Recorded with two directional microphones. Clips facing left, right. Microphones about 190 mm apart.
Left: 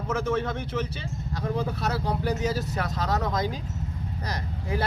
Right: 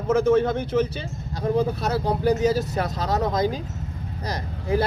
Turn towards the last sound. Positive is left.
turn(degrees=-35)  # may be behind; listen again after turning